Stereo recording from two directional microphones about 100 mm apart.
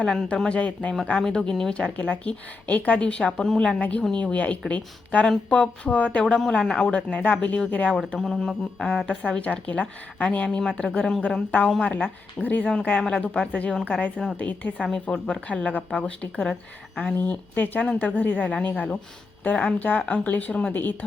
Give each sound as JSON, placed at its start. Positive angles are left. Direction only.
{"t": 0.0, "sound": "speech", "side_deg": 5}